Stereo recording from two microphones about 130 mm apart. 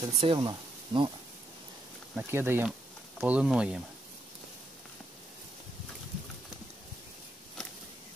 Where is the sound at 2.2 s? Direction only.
15° right (ahead or behind).